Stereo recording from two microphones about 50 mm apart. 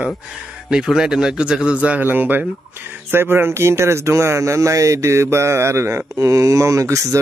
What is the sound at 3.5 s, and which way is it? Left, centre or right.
Speech, right.